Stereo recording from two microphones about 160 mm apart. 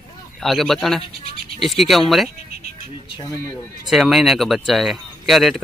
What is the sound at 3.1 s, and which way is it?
Speech, 25° left (ahead or behind).